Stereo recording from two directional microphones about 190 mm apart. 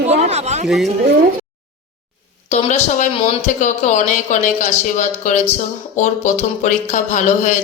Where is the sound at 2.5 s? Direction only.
35° left (ahead or behind).